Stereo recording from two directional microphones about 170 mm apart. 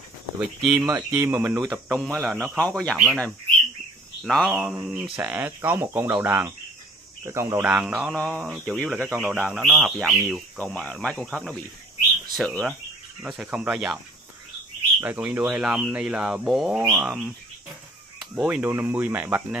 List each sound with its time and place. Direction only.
0.6 s speech: centre (ahead or behind)
0.8 s speech: 15° right (ahead or behind)
1.7 s speech: centre (ahead or behind); by 7.7 s 15° right (ahead or behind)
7.7 s speech: centre (ahead or behind)
15.0 s speech: 10° right (ahead or behind)